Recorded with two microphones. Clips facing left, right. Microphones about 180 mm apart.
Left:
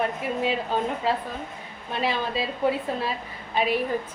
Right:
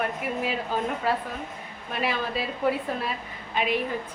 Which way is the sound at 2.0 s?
30° left (ahead or behind).